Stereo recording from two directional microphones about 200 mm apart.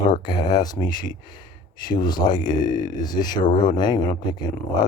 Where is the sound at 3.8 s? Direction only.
20° left (ahead or behind).